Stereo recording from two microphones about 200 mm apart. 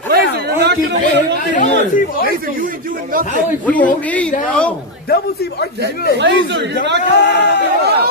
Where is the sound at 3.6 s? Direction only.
5° left (ahead or behind).